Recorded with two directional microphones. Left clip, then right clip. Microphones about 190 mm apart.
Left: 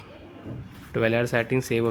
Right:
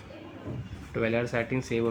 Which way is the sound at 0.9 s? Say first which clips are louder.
Left 5 dB; 45° left (ahead or behind).